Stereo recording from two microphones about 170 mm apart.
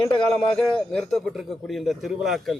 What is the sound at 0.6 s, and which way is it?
A man's voice, 5° left (ahead or behind).